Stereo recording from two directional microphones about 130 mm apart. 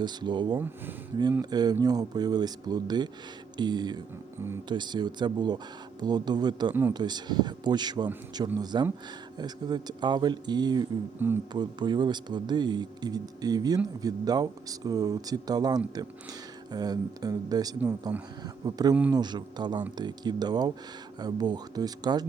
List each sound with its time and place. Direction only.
0.0 s speech: 35° right (ahead or behind)
11.2 s speech: 15° right (ahead or behind)
11.5 s speech: 35° right (ahead or behind)